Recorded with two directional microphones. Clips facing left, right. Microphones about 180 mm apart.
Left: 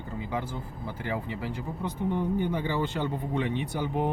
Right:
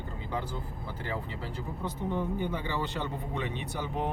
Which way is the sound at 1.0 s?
15° left (ahead or behind).